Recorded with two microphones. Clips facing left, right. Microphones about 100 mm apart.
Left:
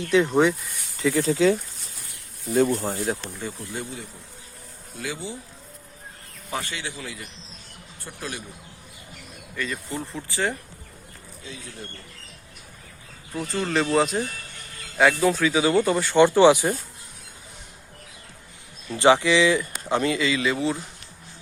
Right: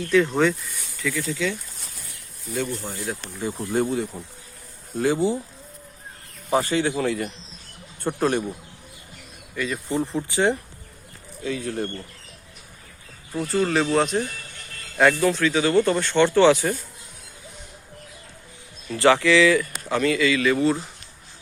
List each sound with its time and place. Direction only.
0.1 s speech: 15° left (ahead or behind)
0.9 s speech: 30° left (ahead or behind)
2.7 s speech: 35° left (ahead or behind)
3.7 s speech: 50° right (ahead or behind)
6.5 s speech: 35° right (ahead or behind)
6.8 s a man's voice: 65° right (ahead or behind)
8.0 s a man's voice: 55° right (ahead or behind)
9.6 s speech: 10° right (ahead or behind)
11.4 s a man's voice: 55° right (ahead or behind)
13.3 s speech: centre (ahead or behind); by 16.7 s 15° left (ahead or behind)
18.9 s speech: 20° left (ahead or behind)